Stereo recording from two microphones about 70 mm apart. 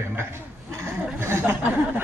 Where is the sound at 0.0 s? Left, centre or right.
Right.